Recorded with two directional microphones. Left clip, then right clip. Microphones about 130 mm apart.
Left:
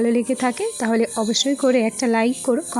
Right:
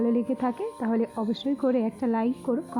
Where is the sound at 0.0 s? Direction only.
25° left (ahead or behind).